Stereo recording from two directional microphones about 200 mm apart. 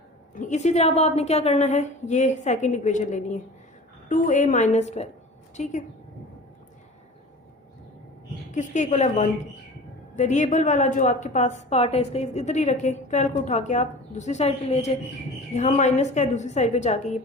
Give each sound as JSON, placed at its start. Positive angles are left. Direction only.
{"t": 0.3, "sound": "a woman's voice", "side_deg": 35}
{"t": 8.5, "sound": "a woman's voice", "side_deg": 35}